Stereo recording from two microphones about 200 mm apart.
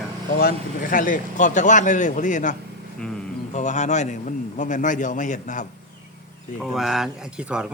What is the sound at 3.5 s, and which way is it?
Speech, 35° left (ahead or behind).